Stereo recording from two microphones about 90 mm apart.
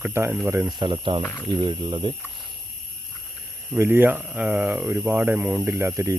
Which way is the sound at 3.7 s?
25° right (ahead or behind).